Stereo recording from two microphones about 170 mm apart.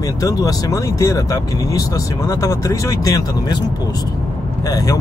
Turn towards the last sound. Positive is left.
turn(degrees=20)  # may be behind; listen again after turning